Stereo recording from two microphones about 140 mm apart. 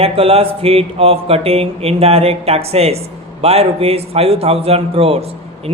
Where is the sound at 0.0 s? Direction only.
45° right (ahead or behind).